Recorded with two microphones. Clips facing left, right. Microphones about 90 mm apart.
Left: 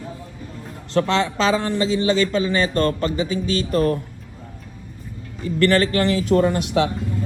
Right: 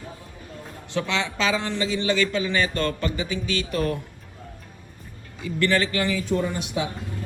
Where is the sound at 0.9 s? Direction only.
50° left (ahead or behind).